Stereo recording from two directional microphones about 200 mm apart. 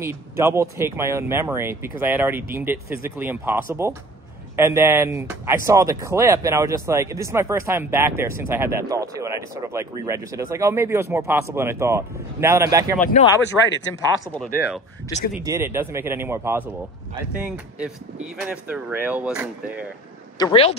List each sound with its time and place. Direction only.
0.0 s speech: 10° right (ahead or behind)
13.2 s speech: 35° left (ahead or behind)
13.5 s speech: centre (ahead or behind)
15.3 s speech: 15° right (ahead or behind)
20.3 s speech: 25° left (ahead or behind)